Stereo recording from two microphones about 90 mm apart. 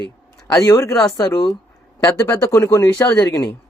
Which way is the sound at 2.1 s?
25° left (ahead or behind).